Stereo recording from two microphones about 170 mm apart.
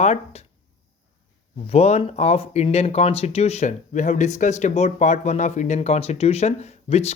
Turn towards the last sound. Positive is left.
turn(degrees=40)  # may be behind; listen again after turning